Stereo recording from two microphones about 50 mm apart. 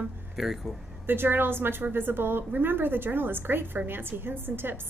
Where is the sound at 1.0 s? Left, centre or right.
Right.